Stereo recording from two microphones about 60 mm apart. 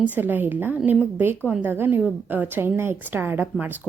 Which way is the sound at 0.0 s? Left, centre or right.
Right.